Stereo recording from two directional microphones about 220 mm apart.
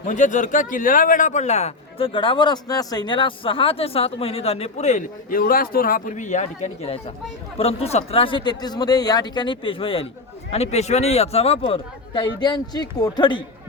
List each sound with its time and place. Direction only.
0.0 s a man's voice: 35° left (ahead or behind); by 13.4 s 20° left (ahead or behind)